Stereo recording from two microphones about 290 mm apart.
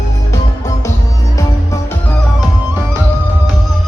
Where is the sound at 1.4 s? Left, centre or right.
Centre.